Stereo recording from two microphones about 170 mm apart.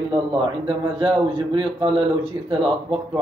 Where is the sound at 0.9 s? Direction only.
30° right (ahead or behind).